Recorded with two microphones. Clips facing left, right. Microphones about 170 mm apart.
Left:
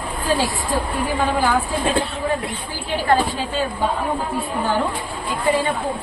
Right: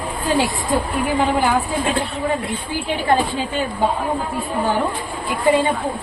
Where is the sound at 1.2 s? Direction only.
20° right (ahead or behind).